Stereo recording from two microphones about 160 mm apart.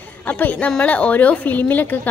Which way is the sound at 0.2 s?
10° left (ahead or behind).